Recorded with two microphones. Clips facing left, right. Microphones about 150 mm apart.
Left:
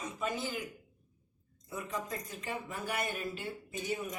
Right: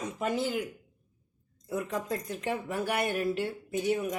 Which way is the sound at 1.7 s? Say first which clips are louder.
Right 7 dB; 70° right (ahead or behind).